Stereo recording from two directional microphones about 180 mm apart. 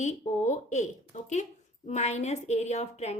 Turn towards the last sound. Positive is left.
turn(degrees=40)  # may be behind; listen again after turning